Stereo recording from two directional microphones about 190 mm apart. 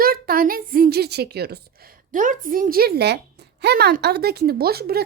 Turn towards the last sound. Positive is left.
turn(degrees=-55)  # may be behind; listen again after turning